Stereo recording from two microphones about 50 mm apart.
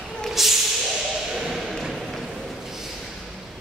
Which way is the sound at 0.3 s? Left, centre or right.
Centre.